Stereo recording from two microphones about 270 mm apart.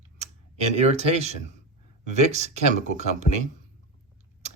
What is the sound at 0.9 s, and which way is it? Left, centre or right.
Speech, right.